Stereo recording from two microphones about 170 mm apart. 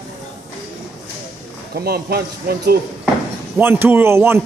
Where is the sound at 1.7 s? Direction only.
65° right (ahead or behind).